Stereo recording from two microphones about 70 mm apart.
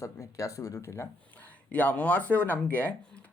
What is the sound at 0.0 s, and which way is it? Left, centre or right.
Speech, left.